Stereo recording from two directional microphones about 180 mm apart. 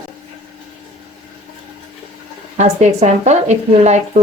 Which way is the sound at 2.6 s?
40° right (ahead or behind).